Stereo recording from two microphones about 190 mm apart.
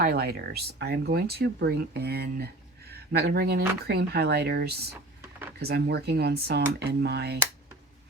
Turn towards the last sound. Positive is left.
turn(degrees=-60)  # may be behind; listen again after turning